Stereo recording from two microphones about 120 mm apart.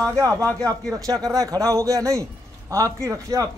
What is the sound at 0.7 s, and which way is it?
Speech, 30° right (ahead or behind).